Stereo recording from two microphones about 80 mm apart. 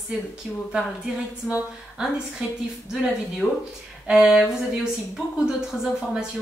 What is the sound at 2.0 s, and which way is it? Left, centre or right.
Speech, centre.